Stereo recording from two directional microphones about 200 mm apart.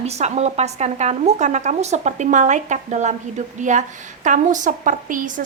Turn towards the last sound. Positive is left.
turn(degrees=-40)  # may be behind; listen again after turning